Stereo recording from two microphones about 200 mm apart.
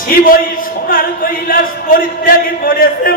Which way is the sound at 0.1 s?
45° left (ahead or behind).